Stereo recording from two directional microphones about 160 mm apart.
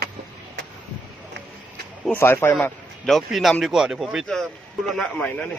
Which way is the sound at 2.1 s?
15° left (ahead or behind).